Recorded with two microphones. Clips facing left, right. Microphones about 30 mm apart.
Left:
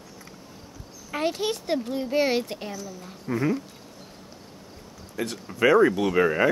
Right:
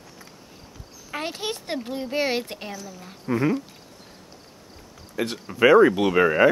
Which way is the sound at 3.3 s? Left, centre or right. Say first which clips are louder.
Right 3 dB; right.